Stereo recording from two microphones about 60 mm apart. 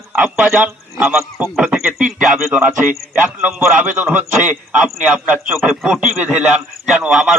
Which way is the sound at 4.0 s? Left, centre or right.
Right.